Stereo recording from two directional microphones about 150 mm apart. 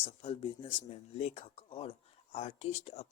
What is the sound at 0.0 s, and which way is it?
Speech, 40° left (ahead or behind).